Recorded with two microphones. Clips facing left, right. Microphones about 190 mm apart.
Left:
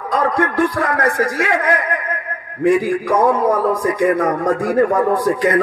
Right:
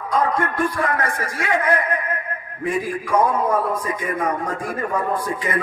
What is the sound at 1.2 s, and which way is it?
Speech, 90° left.